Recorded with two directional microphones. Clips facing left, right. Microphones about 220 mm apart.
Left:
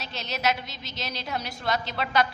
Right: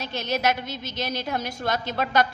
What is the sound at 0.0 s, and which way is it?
A woman's voice, 50° right (ahead or behind).